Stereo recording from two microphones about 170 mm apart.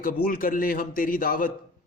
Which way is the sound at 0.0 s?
50° left (ahead or behind).